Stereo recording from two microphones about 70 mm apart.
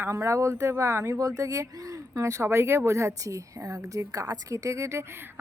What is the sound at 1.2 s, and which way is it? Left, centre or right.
Speech, right.